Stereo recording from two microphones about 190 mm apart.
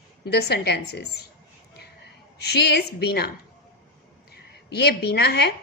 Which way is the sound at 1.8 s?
60° left (ahead or behind).